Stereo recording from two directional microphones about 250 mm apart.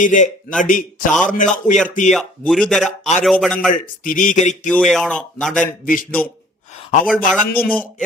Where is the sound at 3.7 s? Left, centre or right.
Left.